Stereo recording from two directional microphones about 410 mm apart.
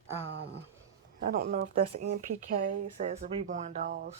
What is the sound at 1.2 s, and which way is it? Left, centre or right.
Speech, centre.